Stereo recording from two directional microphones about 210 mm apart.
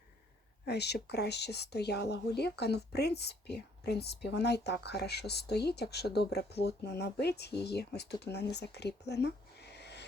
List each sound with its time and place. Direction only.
0.6 s speech: 50° left (ahead or behind)